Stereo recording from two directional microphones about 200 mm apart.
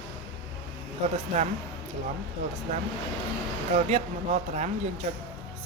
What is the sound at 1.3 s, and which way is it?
Speech, 35° right (ahead or behind).